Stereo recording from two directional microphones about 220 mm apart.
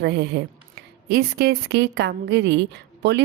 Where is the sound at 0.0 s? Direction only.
50° right (ahead or behind).